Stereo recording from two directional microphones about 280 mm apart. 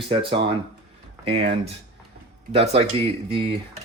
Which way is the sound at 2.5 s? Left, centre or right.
Right.